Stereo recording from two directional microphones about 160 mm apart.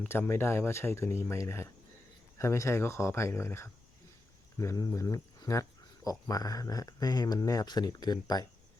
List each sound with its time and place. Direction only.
0.0 s speech: 15° left (ahead or behind)